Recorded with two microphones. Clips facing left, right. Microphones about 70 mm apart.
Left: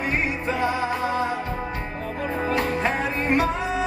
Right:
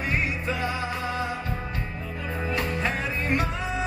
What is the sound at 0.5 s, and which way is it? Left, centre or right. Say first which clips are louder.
Music: left 5 dB; left.